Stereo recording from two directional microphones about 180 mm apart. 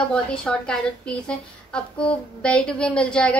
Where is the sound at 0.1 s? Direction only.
5° left (ahead or behind).